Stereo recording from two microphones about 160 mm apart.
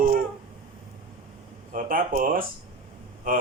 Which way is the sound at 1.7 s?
60° right (ahead or behind).